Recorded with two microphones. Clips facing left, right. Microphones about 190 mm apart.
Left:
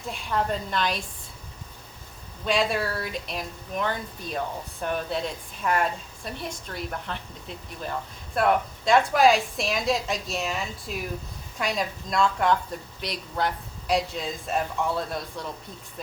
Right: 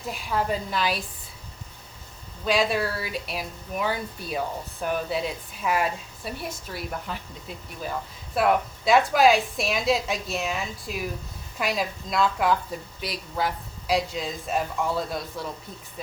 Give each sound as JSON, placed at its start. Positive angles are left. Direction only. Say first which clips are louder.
{"t": 0.0, "sound": "speech", "louder": "even", "side_deg": -5}
{"t": 2.4, "sound": "speech", "louder": "right 1 dB", "side_deg": 0}